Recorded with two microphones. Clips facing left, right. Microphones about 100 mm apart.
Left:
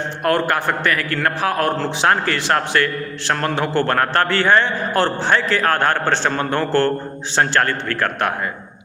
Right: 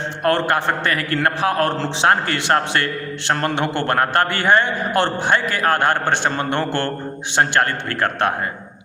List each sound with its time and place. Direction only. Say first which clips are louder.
0.2 s a man's voice: even; 25° right (ahead or behind)